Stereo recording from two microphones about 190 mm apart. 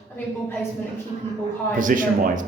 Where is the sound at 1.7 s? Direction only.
45° right (ahead or behind).